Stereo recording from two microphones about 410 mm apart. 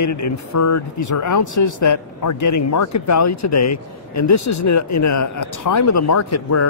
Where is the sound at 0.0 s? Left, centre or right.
Left.